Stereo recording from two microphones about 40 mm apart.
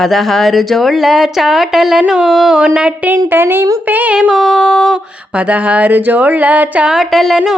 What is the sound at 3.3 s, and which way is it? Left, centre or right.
Speech, right.